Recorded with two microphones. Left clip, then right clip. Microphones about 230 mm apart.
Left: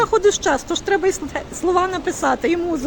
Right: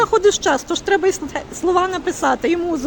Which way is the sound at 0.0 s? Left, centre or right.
Centre.